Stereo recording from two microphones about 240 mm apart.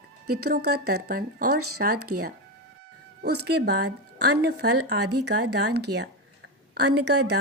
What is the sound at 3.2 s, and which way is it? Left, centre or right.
A woman's voice, right.